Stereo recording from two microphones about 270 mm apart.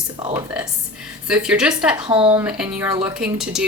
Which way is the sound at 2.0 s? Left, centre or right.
Centre.